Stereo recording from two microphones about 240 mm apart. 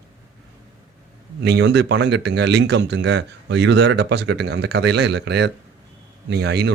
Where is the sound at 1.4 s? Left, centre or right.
Right.